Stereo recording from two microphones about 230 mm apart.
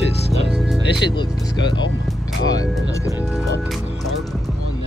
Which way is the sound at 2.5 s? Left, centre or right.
Centre.